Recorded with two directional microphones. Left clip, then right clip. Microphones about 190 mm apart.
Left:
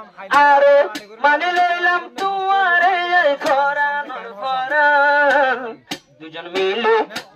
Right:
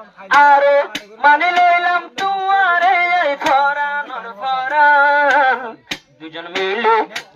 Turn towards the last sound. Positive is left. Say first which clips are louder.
# right 1 dB
turn(degrees=30)  # may be behind; listen again after turning